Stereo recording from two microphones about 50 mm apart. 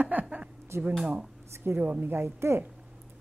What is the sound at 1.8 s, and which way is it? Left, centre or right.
Speech, right.